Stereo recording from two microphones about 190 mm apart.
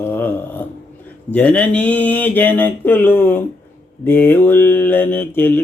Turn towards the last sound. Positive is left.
turn(degrees=10)  # may be behind; listen again after turning